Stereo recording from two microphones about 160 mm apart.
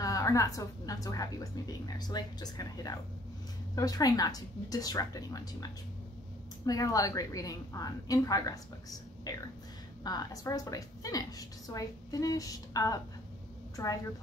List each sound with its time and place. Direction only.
0.0 s a woman's voice: 20° left (ahead or behind)